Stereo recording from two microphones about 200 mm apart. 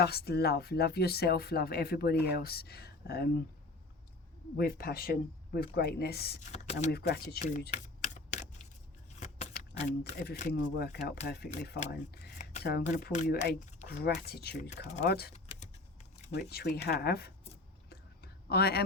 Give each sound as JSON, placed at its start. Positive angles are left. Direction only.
{"t": 0.0, "sound": "speech", "side_deg": 55}
{"t": 4.5, "sound": "speech", "side_deg": 50}
{"t": 6.4, "sound": "speech", "side_deg": 35}
{"t": 6.9, "sound": "speech", "side_deg": 55}
{"t": 7.4, "sound": "typing", "side_deg": 35}
{"t": 10.1, "sound": "speech", "side_deg": 40}
{"t": 10.5, "sound": "speech", "side_deg": 50}
{"t": 10.8, "sound": "speech", "side_deg": 40}
{"t": 11.3, "sound": "speech", "side_deg": 55}
{"t": 13.7, "sound": "a sound", "side_deg": 35}
{"t": 14.0, "sound": "speech", "side_deg": 50}
{"t": 14.7, "sound": "speech", "side_deg": 35}
{"t": 16.4, "sound": "speech", "side_deg": 55}
{"t": 17.8, "sound": "whispering", "side_deg": 55}